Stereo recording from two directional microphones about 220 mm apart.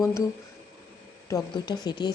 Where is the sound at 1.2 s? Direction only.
15° left (ahead or behind).